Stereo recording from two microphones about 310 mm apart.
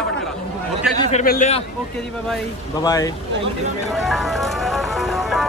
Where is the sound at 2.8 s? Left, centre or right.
Centre.